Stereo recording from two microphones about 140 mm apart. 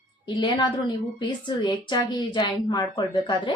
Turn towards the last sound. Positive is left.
turn(degrees=30)  # may be behind; listen again after turning